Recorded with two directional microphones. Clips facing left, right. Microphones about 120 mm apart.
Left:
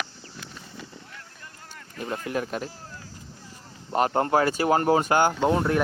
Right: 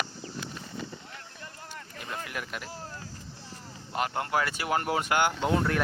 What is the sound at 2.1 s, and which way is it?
Speech, 35° left (ahead or behind).